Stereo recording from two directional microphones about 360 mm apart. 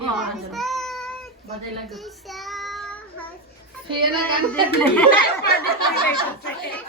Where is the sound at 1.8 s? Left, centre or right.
Centre.